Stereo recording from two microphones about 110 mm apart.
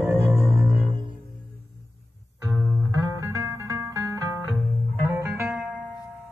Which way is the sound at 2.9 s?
30° right (ahead or behind).